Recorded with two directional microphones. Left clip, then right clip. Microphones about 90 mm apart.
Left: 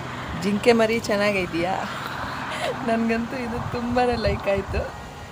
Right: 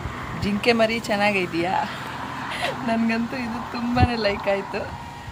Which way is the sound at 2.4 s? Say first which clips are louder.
Right 2 dB; 20° left (ahead or behind).